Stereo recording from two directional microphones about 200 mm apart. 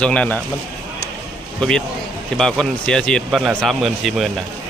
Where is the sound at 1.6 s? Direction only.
5° left (ahead or behind).